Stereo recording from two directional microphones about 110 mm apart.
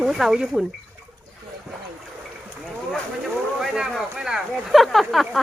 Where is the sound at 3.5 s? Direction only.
5° right (ahead or behind).